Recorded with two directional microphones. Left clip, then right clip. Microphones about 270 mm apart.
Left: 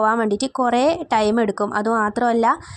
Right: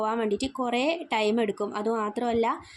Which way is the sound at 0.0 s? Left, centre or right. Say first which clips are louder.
Left 9 dB; left.